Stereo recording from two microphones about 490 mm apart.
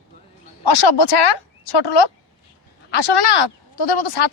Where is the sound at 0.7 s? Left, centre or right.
Left.